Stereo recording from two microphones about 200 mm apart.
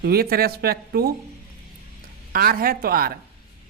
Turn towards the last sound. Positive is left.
turn(degrees=-45)  # may be behind; listen again after turning